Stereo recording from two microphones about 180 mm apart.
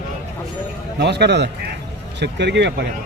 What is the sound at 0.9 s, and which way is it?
A man's voice, 70° right (ahead or behind).